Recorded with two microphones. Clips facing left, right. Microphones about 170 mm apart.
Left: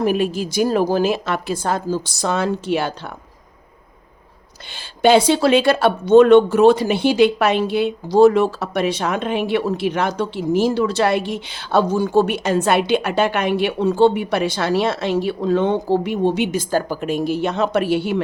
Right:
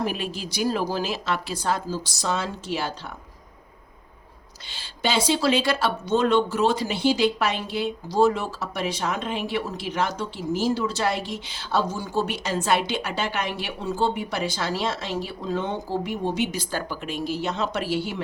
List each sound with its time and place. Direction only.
0.0 s a woman's voice: 50° left (ahead or behind)
4.7 s speech: 55° left (ahead or behind)